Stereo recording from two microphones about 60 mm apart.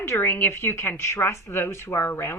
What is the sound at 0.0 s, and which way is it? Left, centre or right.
A woman's voice, left.